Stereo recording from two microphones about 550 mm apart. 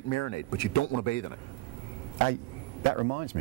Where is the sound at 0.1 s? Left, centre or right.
Left.